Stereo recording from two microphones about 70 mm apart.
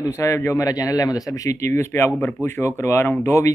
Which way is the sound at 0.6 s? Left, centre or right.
Left.